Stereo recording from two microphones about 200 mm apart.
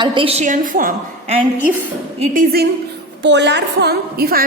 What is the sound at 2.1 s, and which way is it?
Speech, 40° right (ahead or behind).